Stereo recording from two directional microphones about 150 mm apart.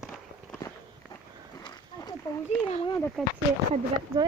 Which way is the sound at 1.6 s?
25° left (ahead or behind).